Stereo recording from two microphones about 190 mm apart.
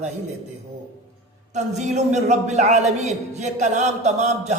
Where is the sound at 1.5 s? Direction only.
40° right (ahead or behind).